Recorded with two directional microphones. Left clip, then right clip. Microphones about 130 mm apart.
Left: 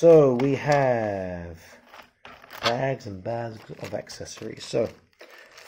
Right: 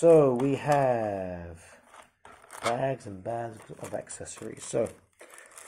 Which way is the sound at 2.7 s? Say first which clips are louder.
Left 3 dB; 50° left (ahead or behind).